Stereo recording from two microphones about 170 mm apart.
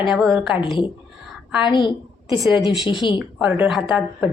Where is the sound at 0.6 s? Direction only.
30° left (ahead or behind).